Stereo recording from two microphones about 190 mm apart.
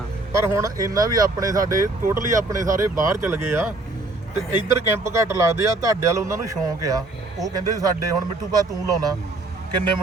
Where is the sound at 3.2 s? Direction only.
10° right (ahead or behind).